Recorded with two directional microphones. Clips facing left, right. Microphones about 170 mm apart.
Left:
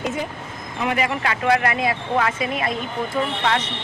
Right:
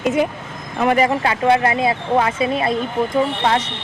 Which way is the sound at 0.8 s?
40° right (ahead or behind).